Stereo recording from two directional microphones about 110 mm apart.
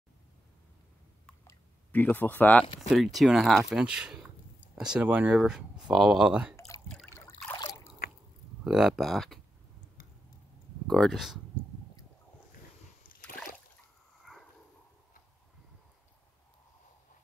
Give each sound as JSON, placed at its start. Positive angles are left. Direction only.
{"t": 1.9, "sound": "speech", "side_deg": 15}
{"t": 2.6, "sound": "speech", "side_deg": 60}
{"t": 2.9, "sound": "speech", "side_deg": 0}
{"t": 6.7, "sound": "drip", "side_deg": 30}
{"t": 7.1, "sound": "trickle", "side_deg": 25}
{"t": 8.6, "sound": "speech", "side_deg": -5}
{"t": 10.9, "sound": "speech", "side_deg": 0}
{"t": 14.2, "sound": "a sound", "side_deg": 0}